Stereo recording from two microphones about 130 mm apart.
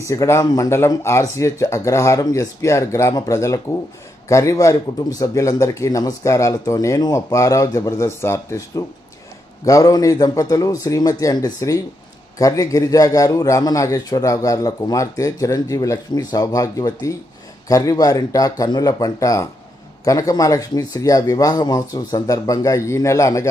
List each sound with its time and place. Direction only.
0.0 s speech: 25° left (ahead or behind)